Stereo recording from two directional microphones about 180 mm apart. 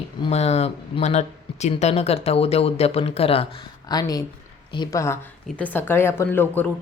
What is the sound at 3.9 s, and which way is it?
Speech, 20° left (ahead or behind).